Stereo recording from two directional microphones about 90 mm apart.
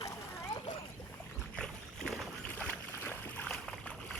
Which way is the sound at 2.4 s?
15° left (ahead or behind).